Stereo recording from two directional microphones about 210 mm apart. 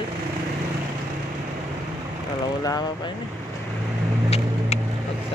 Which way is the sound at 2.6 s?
20° left (ahead or behind).